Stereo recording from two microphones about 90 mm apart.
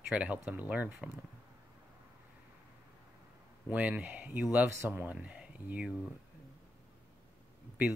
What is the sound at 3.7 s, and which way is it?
Speech, 15° right (ahead or behind).